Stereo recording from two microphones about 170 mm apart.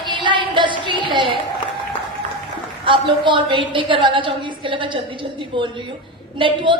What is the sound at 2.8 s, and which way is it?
A woman's voice, 30° right (ahead or behind).